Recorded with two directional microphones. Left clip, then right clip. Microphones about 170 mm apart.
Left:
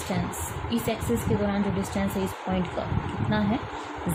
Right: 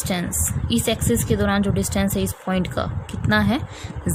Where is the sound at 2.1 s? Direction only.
70° right (ahead or behind).